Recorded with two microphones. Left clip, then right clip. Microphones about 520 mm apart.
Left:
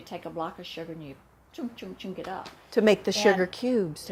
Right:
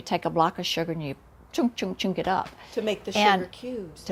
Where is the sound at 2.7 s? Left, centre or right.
Left.